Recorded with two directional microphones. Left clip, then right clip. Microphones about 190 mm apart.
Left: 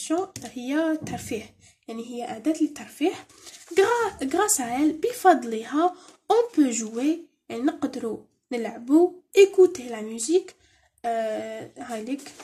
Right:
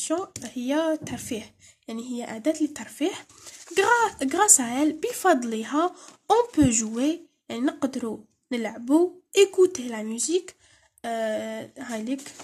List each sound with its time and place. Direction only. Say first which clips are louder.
0.0 s speech: left 1 dB; 35° right (ahead or behind)